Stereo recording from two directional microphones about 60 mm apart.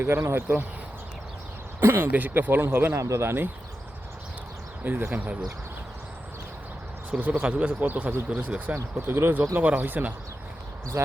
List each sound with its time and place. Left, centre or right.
0.0 s speech: right
2.0 s speech: right
3.0 s speech: right
3.2 s speech: right
4.8 s speech: right
7.1 s speech: right
8.7 s speech: right
10.9 s speech: right